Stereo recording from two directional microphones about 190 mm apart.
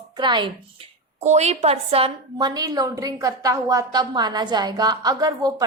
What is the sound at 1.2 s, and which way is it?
A woman's voice, 35° right (ahead or behind).